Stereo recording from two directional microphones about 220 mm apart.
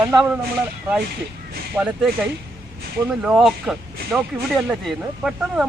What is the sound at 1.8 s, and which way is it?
Speech, 10° right (ahead or behind).